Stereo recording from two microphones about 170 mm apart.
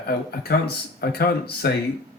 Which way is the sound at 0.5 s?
70° left (ahead or behind).